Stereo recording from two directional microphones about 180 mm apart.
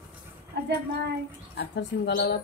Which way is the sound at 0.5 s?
65° right (ahead or behind).